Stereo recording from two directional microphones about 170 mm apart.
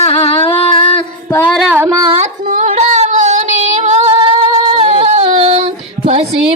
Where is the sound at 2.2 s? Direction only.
45° right (ahead or behind).